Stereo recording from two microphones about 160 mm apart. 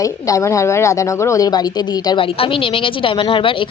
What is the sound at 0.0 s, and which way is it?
A woman's voice, 20° left (ahead or behind).